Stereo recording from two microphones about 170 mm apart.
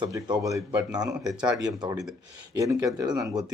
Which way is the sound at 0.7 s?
5° right (ahead or behind).